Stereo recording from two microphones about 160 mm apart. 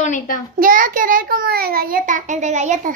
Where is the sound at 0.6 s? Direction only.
60° right (ahead or behind).